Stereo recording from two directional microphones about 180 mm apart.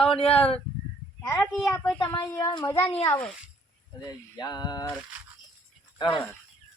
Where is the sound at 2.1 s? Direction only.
20° left (ahead or behind).